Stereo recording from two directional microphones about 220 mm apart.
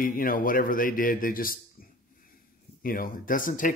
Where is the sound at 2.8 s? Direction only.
40° left (ahead or behind).